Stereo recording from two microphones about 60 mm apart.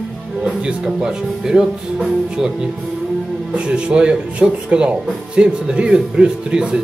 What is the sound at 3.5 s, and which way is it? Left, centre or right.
Speech, centre.